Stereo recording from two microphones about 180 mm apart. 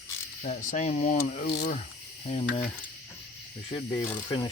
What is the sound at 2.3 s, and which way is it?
Speech, 35° left (ahead or behind).